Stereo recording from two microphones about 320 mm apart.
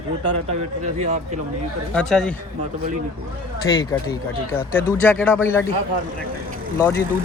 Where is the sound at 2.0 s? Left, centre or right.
Centre.